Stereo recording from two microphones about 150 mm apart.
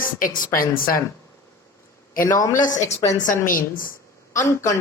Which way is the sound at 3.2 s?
65° left (ahead or behind).